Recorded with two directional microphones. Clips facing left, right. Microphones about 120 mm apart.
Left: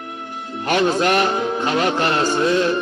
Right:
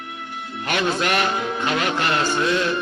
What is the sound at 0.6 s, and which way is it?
Music, 35° left (ahead or behind).